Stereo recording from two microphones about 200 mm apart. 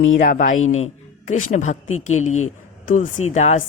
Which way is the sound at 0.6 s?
90° left.